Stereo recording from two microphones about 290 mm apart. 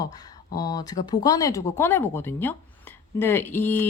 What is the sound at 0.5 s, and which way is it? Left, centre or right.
Speech, centre.